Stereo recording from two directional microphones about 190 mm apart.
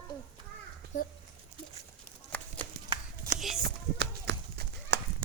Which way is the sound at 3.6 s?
60° right (ahead or behind).